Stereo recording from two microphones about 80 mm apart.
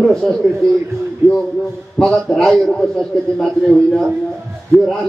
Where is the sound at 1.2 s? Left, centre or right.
Right.